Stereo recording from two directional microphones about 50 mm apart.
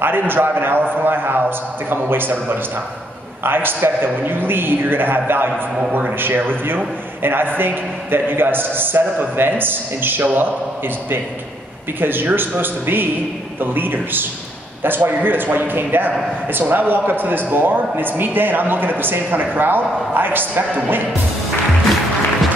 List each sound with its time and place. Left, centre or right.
0.0 s a man's voice: right
12.0 s a man's voice: right